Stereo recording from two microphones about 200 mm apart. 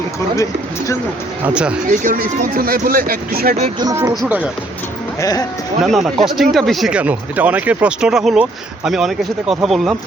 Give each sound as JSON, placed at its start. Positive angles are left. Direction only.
{"t": 1.5, "sound": "speech", "side_deg": -5}
{"t": 1.9, "sound": "speech", "side_deg": -45}
{"t": 3.8, "sound": "speech", "side_deg": -20}
{"t": 4.1, "sound": "speech", "side_deg": -5}
{"t": 5.2, "sound": "speech", "side_deg": 20}
{"t": 5.8, "sound": "speech", "side_deg": 0}